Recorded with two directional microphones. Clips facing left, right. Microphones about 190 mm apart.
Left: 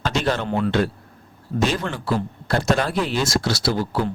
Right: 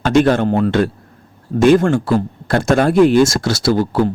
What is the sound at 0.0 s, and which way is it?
A man's voice, 55° right (ahead or behind).